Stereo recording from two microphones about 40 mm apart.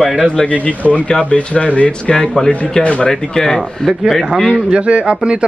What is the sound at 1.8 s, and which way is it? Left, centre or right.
Speech, left.